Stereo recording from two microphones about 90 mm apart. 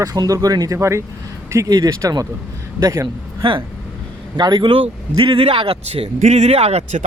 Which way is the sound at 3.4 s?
70° right (ahead or behind).